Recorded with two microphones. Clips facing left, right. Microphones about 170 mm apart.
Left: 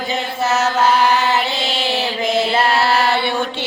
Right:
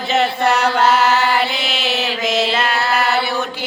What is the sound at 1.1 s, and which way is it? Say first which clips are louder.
Music: even; 15° left (ahead or behind).